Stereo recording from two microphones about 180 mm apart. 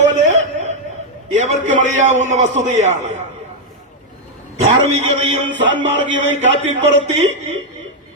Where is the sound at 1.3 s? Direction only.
40° right (ahead or behind).